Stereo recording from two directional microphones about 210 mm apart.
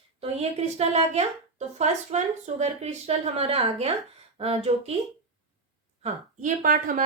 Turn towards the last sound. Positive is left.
turn(degrees=-40)  # may be behind; listen again after turning